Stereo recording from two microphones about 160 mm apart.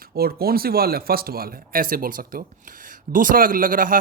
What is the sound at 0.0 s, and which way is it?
Speech, 70° right (ahead or behind).